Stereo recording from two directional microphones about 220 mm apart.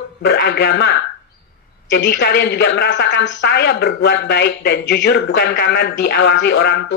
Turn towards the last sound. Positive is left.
turn(degrees=55)  # may be behind; listen again after turning